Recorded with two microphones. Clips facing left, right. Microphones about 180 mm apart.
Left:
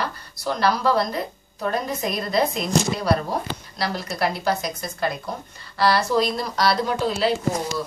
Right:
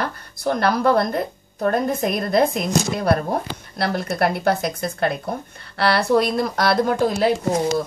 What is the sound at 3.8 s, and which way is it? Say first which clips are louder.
Speech: right 4 dB; 55° right (ahead or behind).